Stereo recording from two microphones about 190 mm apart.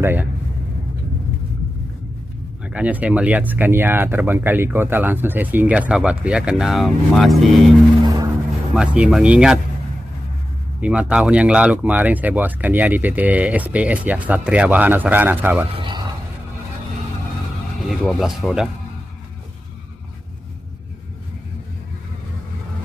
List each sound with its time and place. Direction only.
0.0 s speech: 10° right (ahead or behind)
2.6 s speech: 5° right (ahead or behind)
8.0 s music: 20° right (ahead or behind)
8.7 s speech: 5° right (ahead or behind)
10.8 s speech: 5° right (ahead or behind)
15.7 s a man's voice: 25° right (ahead or behind)
17.8 s speech: centre (ahead or behind)